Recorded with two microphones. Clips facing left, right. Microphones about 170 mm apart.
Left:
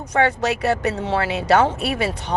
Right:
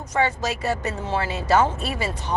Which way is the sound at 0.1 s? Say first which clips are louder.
Left 4 dB; 65° left (ahead or behind).